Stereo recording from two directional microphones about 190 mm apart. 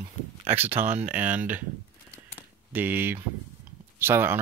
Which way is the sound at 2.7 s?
10° right (ahead or behind).